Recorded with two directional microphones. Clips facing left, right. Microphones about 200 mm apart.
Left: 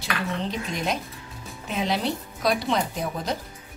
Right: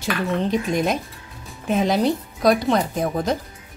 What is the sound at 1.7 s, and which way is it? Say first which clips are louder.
A woman's voice: right 7 dB; 45° right (ahead or behind).